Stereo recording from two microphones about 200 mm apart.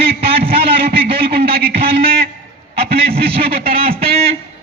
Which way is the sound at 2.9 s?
30° right (ahead or behind).